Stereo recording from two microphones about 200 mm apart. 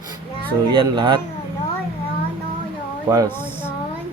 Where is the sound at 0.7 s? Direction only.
25° right (ahead or behind).